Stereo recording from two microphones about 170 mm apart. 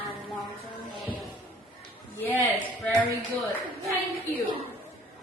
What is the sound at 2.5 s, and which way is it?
Speech, 10° left (ahead or behind).